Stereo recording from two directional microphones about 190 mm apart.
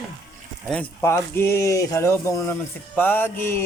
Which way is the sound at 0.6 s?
10° left (ahead or behind).